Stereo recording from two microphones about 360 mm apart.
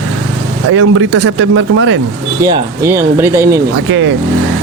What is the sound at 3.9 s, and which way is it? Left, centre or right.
Speech, right.